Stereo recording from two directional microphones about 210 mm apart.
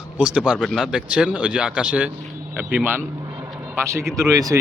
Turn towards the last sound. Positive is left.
turn(degrees=-15)  # may be behind; listen again after turning